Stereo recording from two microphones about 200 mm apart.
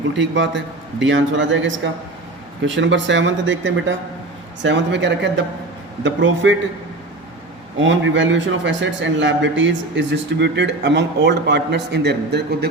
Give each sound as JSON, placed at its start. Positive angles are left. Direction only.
{"t": 0.1, "sound": "a man's voice", "side_deg": -65}
{"t": 7.8, "sound": "a man's voice", "side_deg": -70}